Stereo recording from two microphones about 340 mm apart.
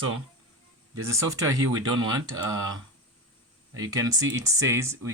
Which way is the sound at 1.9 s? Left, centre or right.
Right.